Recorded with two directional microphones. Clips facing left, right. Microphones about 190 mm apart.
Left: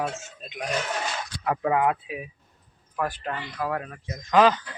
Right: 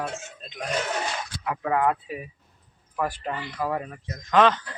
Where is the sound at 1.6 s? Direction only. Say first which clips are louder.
Even; 15° left (ahead or behind).